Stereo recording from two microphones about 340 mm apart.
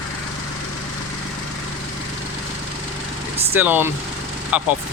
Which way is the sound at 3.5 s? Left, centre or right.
Centre.